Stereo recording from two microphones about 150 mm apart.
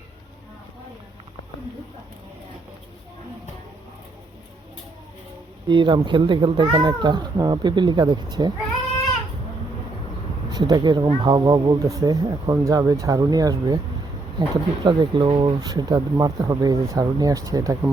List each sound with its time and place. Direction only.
5.6 s speech: 30° right (ahead or behind)
10.5 s speech: 30° right (ahead or behind)